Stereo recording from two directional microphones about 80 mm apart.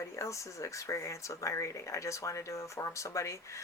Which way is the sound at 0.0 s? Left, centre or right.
Left.